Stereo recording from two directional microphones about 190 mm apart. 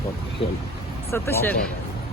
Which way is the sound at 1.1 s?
15° left (ahead or behind).